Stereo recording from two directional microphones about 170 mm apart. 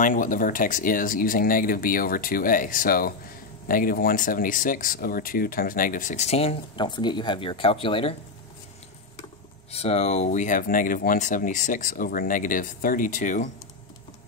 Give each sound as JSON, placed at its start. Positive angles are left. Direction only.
{"t": 0.0, "sound": "speech", "side_deg": 50}
{"t": 9.7, "sound": "speech", "side_deg": 35}